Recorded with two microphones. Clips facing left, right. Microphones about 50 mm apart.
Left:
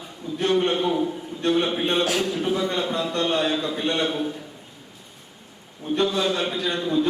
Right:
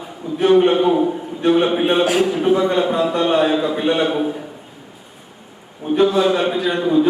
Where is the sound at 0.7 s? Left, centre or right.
Centre.